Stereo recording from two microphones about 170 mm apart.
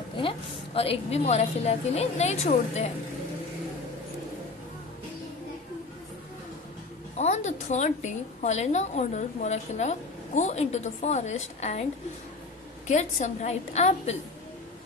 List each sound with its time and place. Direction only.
0.2 s a woman's voice: 35° left (ahead or behind)
7.2 s a woman's voice: 40° left (ahead or behind)
12.8 s a woman's voice: 45° left (ahead or behind)